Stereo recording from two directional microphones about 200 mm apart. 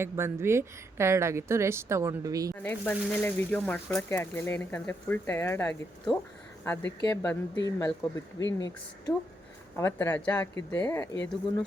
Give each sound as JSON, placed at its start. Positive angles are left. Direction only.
{"t": 0.0, "sound": "speech", "side_deg": -10}
{"t": 2.5, "sound": "speech", "side_deg": 10}